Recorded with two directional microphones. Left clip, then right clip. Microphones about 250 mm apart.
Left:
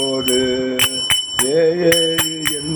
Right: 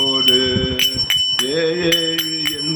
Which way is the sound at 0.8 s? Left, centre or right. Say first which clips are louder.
Right 2 dB; centre.